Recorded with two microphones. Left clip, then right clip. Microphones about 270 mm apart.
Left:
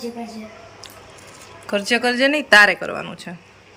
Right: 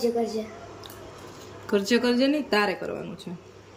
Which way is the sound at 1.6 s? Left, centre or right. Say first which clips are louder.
Left 4 dB; centre.